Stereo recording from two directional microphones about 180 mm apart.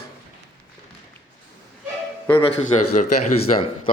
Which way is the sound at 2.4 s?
30° left (ahead or behind).